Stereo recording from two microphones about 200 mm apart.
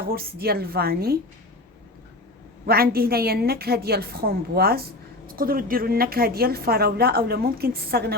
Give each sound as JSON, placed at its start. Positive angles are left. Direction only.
{"t": 0.0, "sound": "a woman's voice", "side_deg": -50}
{"t": 2.6, "sound": "a woman's voice", "side_deg": -50}